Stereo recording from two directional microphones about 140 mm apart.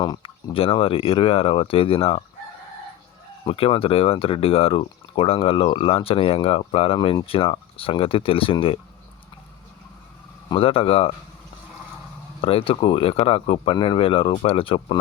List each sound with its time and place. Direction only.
0.0 s speech: 35° left (ahead or behind)
3.4 s speech: 40° left (ahead or behind)
10.5 s speech: 40° left (ahead or behind)
12.4 s speech: 40° left (ahead or behind)